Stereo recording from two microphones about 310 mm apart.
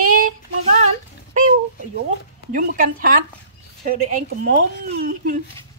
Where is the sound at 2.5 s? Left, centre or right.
Right.